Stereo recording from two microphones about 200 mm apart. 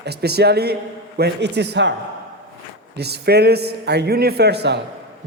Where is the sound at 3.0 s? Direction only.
55° right (ahead or behind).